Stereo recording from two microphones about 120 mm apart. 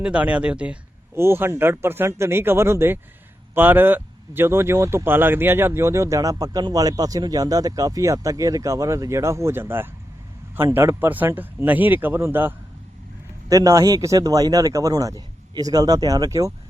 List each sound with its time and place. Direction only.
0.0 s speech: 10° right (ahead or behind)
1.1 s speech: 20° right (ahead or behind)
13.5 s speech: 30° right (ahead or behind)